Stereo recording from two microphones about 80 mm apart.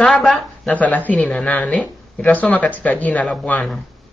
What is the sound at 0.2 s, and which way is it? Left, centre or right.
Speech, centre.